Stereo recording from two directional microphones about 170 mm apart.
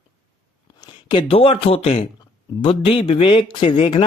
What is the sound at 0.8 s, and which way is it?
A man's voice, 30° left (ahead or behind).